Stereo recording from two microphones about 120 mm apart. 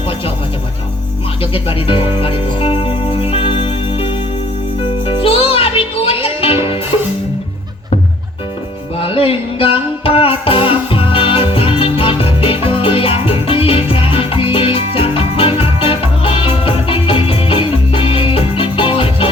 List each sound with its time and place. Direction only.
1.5 s music: 50° left (ahead or behind)
9.0 s music: 50° left (ahead or behind)